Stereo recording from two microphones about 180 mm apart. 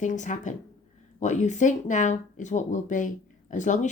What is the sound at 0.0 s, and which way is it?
Speech, 45° left (ahead or behind).